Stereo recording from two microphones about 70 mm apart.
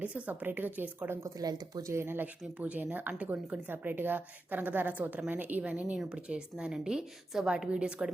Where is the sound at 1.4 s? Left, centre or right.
Right.